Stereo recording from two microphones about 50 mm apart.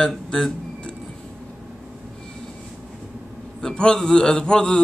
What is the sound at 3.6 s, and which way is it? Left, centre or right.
A man's voice, centre.